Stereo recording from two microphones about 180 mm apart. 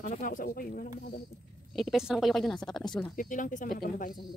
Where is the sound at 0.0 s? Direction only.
45° left (ahead or behind).